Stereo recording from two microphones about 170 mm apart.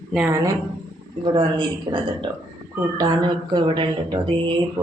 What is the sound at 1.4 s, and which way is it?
Speech, 25° right (ahead or behind).